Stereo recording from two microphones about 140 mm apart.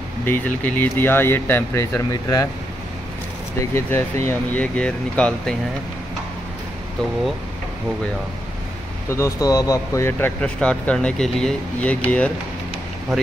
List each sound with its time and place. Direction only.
0.2 s speech: 15° left (ahead or behind)
3.7 s speech: 15° left (ahead or behind)
9.1 s speech: 20° left (ahead or behind)
10.4 s speech: 5° left (ahead or behind)